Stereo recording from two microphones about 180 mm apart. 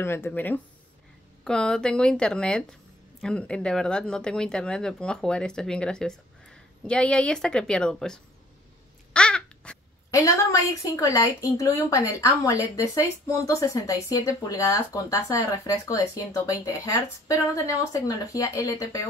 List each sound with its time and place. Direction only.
0.0 s speech: 15° left (ahead or behind)
9.1 s babbling: 5° left (ahead or behind)
10.1 s speech: 15° left (ahead or behind)